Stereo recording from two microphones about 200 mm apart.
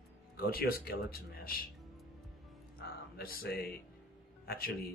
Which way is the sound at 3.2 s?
50° left (ahead or behind).